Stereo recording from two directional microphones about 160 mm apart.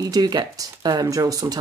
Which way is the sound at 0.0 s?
25° right (ahead or behind).